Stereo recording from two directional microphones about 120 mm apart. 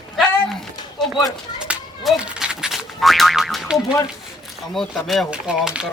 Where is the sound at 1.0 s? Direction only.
Centre (ahead or behind).